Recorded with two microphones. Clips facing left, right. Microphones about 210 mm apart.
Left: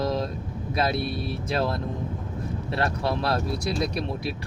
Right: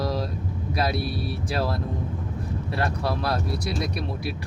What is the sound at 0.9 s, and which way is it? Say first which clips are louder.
Speech: even; 5° right (ahead or behind).